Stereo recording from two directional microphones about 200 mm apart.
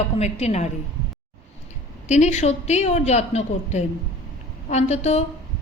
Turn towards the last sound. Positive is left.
turn(degrees=35)  # may be behind; listen again after turning